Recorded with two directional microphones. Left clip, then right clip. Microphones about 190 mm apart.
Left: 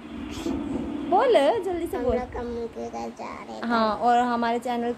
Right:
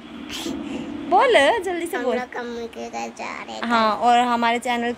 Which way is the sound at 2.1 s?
10° left (ahead or behind).